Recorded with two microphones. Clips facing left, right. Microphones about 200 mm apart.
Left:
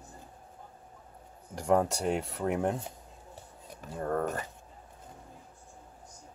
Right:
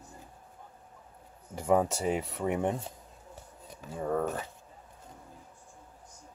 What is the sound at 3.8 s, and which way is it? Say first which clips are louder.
Speech: right 1 dB; centre (ahead or behind).